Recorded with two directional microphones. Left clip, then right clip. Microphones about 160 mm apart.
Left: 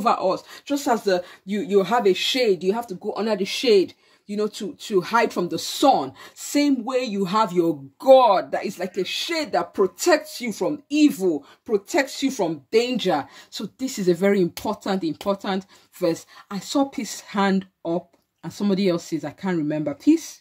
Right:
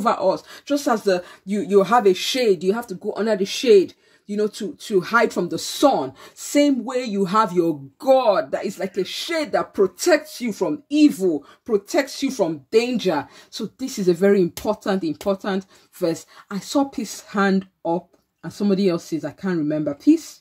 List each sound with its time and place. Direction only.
0.0 s speech: 15° left (ahead or behind)
10.9 s speech: 45° left (ahead or behind)
11.2 s speech: 15° left (ahead or behind)